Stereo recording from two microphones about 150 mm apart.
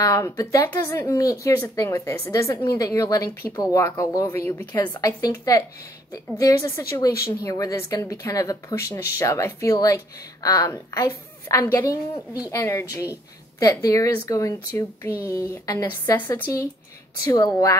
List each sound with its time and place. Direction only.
0.0 s speech: 20° left (ahead or behind)